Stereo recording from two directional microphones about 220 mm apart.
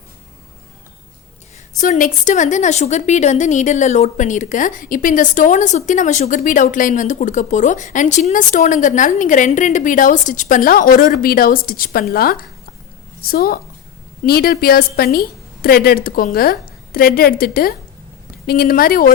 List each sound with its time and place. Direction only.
1.7 s a woman's voice: 35° left (ahead or behind)